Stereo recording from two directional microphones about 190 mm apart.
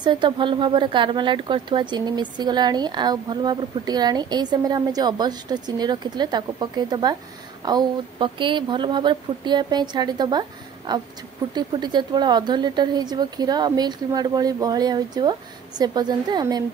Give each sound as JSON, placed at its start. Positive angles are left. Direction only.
{"t": 0.0, "sound": "speech", "side_deg": -25}